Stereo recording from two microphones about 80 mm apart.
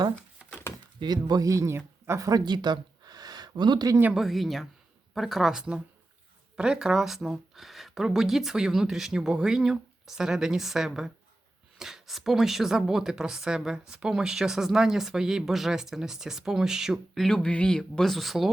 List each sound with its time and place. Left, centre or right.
0.9 s speech: right
2.4 s a sound: right
4.1 s speech: centre
17.2 s speech: centre